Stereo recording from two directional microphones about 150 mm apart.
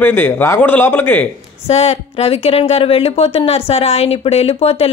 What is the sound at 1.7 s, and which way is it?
A woman's voice, 45° left (ahead or behind).